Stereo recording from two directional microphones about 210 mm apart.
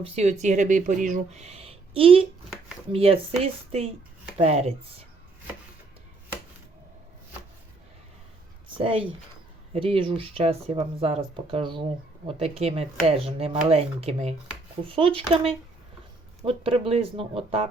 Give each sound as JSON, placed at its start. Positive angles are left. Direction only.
{"t": 0.0, "sound": "speech", "side_deg": -30}
{"t": 8.8, "sound": "speech", "side_deg": -25}
{"t": 16.5, "sound": "speech", "side_deg": -25}